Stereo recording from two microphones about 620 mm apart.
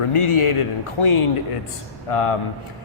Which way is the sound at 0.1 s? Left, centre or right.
Left.